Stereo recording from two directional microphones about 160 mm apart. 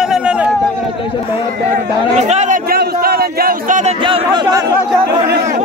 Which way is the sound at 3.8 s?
35° right (ahead or behind).